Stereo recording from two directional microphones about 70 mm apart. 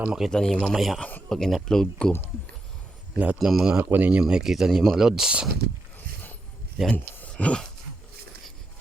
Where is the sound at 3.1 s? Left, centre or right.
Right.